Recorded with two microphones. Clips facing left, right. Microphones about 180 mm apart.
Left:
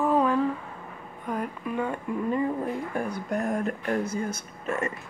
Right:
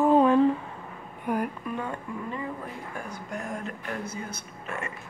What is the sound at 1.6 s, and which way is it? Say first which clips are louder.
Speech: left 3 dB; 5° left (ahead or behind).